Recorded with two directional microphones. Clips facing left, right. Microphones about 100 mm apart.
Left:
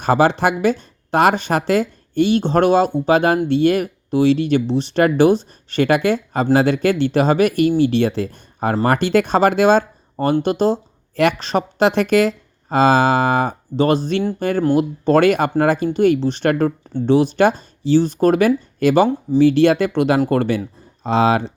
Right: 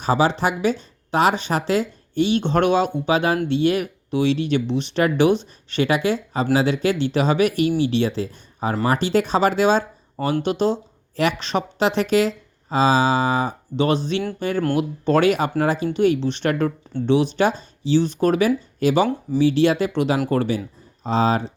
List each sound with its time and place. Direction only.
0.0 s speech: 55° left (ahead or behind)
21.0 s speech: 70° left (ahead or behind)